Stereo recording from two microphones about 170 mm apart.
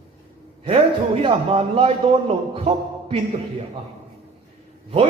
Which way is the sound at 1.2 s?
35° right (ahead or behind).